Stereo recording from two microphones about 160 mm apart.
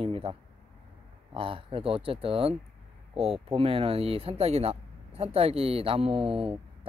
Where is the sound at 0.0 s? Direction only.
35° right (ahead or behind).